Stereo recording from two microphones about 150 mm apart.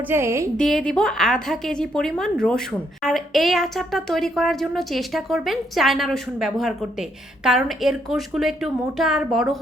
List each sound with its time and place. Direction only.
0.1 s a woman's voice: 15° right (ahead or behind)
0.5 s a woman's voice: 5° left (ahead or behind)